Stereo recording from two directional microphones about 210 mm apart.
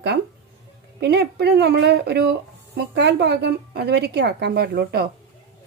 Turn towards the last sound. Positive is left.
turn(degrees=-50)  # may be behind; listen again after turning